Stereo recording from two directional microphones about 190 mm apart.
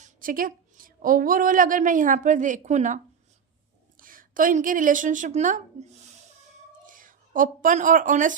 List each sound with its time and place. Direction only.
0.0 s a woman's voice: 45° right (ahead or behind)